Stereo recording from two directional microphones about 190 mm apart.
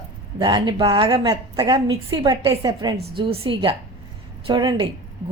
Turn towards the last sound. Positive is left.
turn(degrees=-25)  # may be behind; listen again after turning